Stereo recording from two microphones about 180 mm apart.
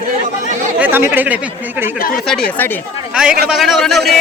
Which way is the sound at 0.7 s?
10° right (ahead or behind).